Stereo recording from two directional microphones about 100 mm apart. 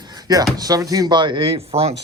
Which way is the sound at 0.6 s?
35° right (ahead or behind).